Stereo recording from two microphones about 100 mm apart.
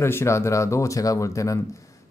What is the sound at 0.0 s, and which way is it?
Speech, 25° left (ahead or behind).